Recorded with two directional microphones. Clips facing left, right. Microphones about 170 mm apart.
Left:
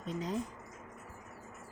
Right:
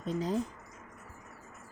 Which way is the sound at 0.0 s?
35° right (ahead or behind).